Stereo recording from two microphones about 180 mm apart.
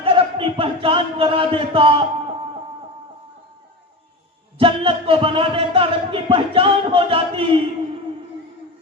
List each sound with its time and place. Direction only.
0.0 s speech: 30° right (ahead or behind)
4.5 s speech: 30° right (ahead or behind)